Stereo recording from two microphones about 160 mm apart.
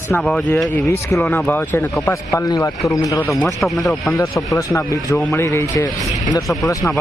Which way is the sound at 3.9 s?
Centre (ahead or behind).